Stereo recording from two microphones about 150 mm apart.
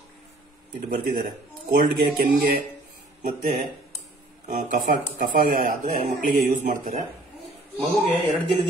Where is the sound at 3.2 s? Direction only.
60° right (ahead or behind).